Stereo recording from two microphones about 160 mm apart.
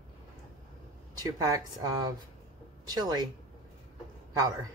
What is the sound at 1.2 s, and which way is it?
Speech, 25° right (ahead or behind).